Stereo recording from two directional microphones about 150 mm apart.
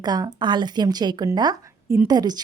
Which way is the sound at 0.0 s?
25° right (ahead or behind).